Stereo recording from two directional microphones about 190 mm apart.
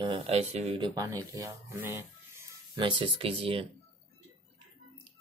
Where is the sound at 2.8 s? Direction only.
25° right (ahead or behind).